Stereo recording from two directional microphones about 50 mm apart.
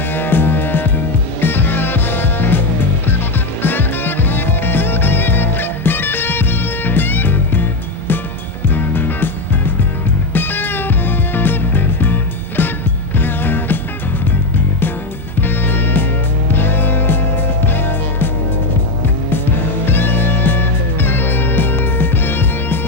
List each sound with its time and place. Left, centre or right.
0.1 s music: left
3.6 s music: left
15.4 s music: left
19.8 s music: left